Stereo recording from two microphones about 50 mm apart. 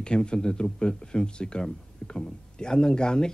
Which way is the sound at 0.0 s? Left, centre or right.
Centre.